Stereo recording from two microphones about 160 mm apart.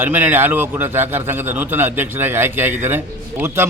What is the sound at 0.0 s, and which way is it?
A man's voice, 10° right (ahead or behind).